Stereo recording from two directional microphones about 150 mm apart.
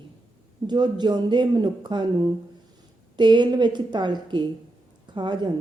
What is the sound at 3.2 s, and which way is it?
A woman's voice, 30° right (ahead or behind).